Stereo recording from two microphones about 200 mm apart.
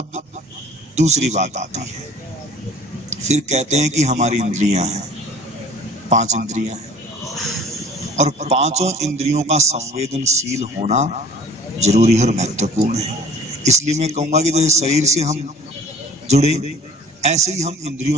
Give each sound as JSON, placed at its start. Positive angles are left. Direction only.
{"t": 0.9, "sound": "a man's voice", "side_deg": -35}
{"t": 3.1, "sound": "a man's voice", "side_deg": -35}
{"t": 6.0, "sound": "a man's voice", "side_deg": -35}
{"t": 8.2, "sound": "a man's voice", "side_deg": -35}